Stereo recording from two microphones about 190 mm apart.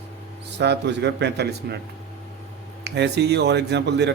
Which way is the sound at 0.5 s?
65° right (ahead or behind).